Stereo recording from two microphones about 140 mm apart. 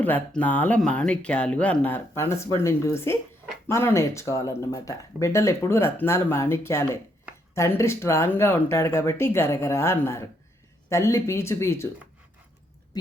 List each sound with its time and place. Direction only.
0.0 s speech: 10° left (ahead or behind)